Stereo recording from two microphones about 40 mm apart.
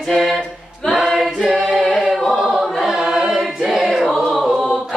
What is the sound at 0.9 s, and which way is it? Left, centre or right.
Choir, centre.